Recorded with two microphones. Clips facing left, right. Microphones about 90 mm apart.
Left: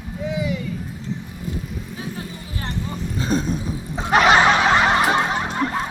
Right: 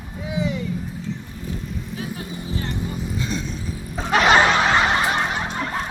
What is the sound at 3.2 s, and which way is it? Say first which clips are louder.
Music: left 6 dB; 40° left (ahead or behind).